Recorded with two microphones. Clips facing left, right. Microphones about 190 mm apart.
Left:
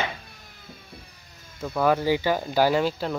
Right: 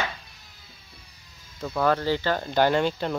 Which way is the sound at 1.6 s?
5° left (ahead or behind).